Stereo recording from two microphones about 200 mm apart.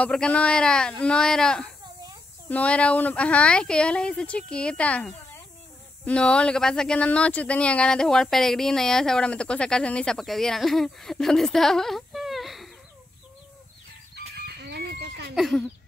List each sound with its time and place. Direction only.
0.0 s speech: 5° left (ahead or behind)
14.1 s chicken: 55° right (ahead or behind)
15.3 s a sound: centre (ahead or behind)